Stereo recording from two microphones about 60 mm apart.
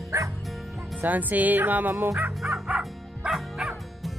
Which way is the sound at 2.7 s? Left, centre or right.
Centre.